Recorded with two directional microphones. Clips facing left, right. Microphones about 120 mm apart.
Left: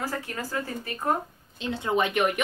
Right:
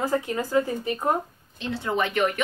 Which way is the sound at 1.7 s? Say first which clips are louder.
Even; 20° left (ahead or behind).